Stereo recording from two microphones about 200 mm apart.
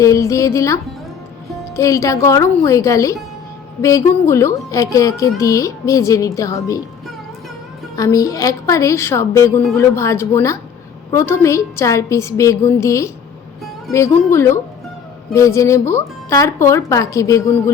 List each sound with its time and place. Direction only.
0.0 s a woman's voice: 15° left (ahead or behind)
7.9 s a woman's voice: 15° left (ahead or behind)